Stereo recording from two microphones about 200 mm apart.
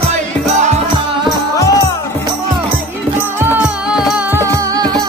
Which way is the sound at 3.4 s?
10° right (ahead or behind).